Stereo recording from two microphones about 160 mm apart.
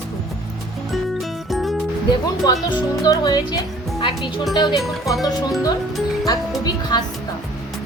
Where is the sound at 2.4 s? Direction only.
25° left (ahead or behind).